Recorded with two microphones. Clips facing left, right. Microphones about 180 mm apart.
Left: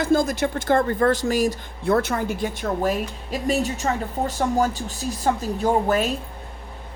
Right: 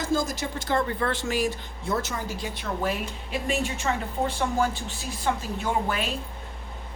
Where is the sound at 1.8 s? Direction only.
60° left (ahead or behind); by 6.1 s 40° left (ahead or behind).